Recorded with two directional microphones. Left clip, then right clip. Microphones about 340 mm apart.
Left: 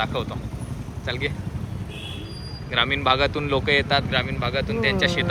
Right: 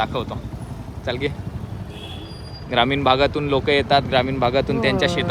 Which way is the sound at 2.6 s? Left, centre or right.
Centre.